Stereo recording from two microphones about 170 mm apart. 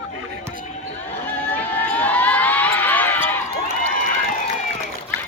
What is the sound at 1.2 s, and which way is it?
Crowd, 10° left (ahead or behind).